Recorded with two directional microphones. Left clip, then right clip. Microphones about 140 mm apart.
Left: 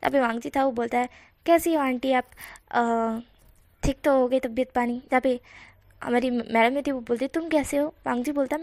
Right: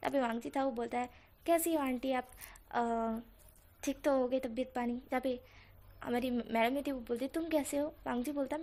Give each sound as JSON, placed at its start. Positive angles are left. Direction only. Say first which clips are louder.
{"t": 0.0, "sound": "a woman's voice", "louder": "left 11 dB", "side_deg": 25}